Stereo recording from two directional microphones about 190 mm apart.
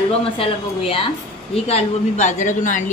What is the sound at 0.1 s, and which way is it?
Speech, 30° left (ahead or behind).